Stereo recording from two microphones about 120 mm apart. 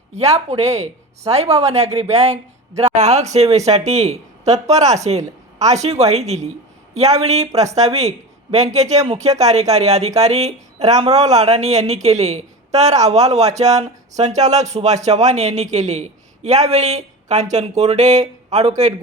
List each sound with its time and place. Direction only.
0.1 s a woman's voice: 65° right (ahead or behind)